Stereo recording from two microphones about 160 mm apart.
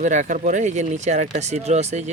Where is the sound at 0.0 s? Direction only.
50° right (ahead or behind).